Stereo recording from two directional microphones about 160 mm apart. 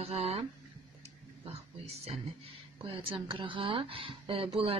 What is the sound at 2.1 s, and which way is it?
Speech, 35° right (ahead or behind).